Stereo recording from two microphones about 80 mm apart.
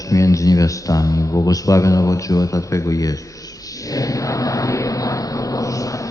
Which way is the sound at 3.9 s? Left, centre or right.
Left.